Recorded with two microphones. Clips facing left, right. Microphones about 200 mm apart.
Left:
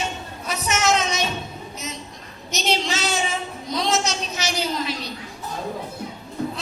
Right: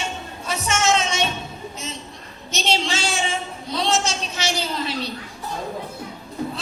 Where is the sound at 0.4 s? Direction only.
30° right (ahead or behind).